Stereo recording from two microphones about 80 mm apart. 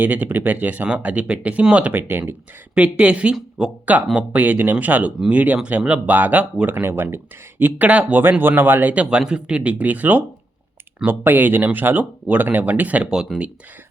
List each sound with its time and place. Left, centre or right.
0.0 s speech: right
1.9 s speech: right; by 13.5 s centre